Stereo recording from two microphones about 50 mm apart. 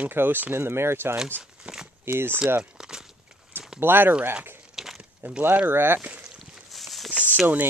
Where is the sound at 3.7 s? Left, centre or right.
Right.